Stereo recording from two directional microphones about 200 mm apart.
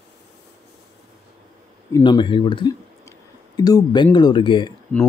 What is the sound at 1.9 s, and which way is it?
Speech, 25° left (ahead or behind).